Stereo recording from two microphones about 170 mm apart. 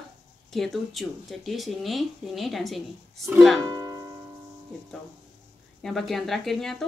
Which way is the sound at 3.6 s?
20° right (ahead or behind).